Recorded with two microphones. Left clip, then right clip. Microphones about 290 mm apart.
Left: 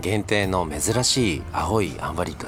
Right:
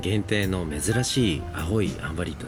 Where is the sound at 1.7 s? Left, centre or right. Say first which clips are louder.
Left 4 dB; centre.